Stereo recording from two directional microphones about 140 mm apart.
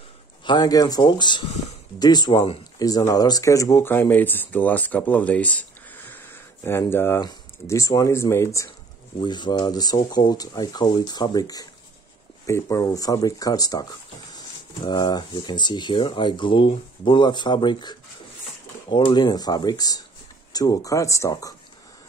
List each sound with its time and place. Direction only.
0.5 s speech: 30° left (ahead or behind)
9.2 s speech: 35° left (ahead or behind)